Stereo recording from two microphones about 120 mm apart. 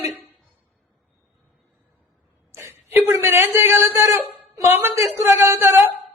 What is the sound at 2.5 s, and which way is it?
A man's voice, 20° right (ahead or behind).